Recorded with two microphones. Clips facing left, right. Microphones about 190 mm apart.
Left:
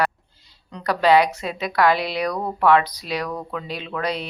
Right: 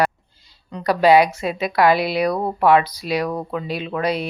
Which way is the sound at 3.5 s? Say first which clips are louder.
Right 4 dB; 10° right (ahead or behind).